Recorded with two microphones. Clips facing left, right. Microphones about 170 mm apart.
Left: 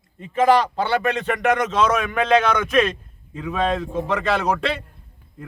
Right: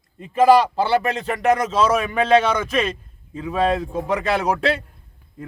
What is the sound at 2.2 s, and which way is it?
Speech, 30° right (ahead or behind).